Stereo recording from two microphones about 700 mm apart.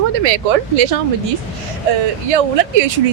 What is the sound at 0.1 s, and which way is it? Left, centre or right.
Speech, right.